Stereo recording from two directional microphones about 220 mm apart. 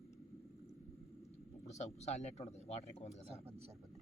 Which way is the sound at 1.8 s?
30° left (ahead or behind).